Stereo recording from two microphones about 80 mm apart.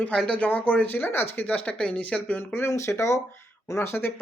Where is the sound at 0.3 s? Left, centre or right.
Left.